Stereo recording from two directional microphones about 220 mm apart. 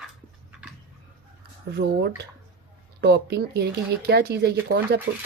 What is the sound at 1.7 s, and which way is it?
Speech, 50° right (ahead or behind).